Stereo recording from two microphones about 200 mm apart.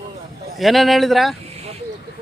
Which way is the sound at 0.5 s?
Centre (ahead or behind).